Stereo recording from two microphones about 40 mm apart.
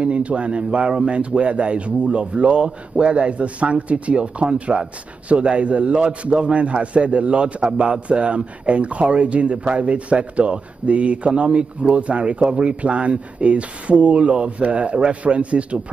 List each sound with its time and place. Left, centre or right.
0.0 s speech: right